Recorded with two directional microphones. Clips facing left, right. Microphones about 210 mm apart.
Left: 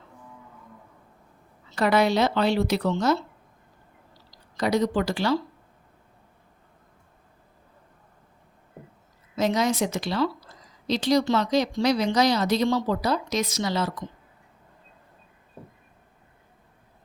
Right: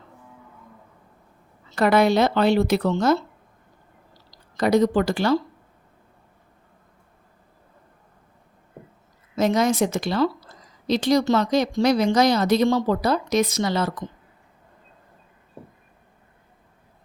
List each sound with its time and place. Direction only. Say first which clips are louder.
1.7 s speech: right 3 dB; 55° right (ahead or behind)
4.5 s speech: right 5 dB; 50° right (ahead or behind)
9.3 s speech: right 3 dB; 50° right (ahead or behind)